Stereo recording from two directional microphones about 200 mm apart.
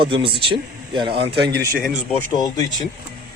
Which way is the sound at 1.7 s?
45° right (ahead or behind).